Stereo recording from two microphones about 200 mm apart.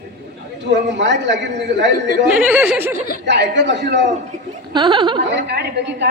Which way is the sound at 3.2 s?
60° right (ahead or behind).